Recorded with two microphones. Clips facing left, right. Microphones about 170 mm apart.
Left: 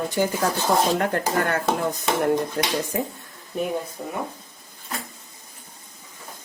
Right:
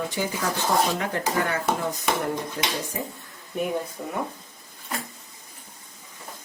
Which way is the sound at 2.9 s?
80° left.